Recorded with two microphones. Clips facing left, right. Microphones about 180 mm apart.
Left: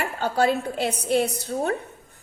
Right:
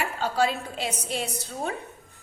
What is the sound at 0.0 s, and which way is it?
A woman's voice, 60° left (ahead or behind).